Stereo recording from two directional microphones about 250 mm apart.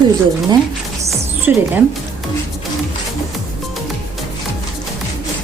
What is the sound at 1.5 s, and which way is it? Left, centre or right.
Speech, centre.